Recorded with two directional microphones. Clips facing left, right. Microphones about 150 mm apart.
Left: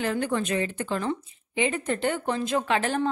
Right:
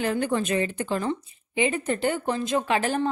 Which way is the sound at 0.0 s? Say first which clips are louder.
Right 2 dB; 15° right (ahead or behind).